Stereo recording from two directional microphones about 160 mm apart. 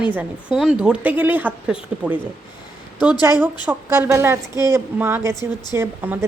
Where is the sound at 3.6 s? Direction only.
15° right (ahead or behind).